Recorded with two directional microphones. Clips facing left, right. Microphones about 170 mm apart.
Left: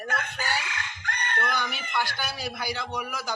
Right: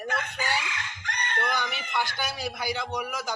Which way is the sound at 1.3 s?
20° right (ahead or behind).